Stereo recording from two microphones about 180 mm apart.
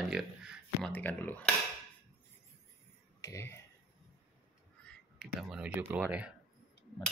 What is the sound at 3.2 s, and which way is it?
Speech, 15° left (ahead or behind).